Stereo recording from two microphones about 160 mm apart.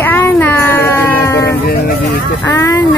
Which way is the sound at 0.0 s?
10° left (ahead or behind).